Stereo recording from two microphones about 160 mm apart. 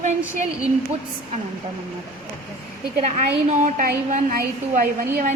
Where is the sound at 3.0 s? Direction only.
50° right (ahead or behind).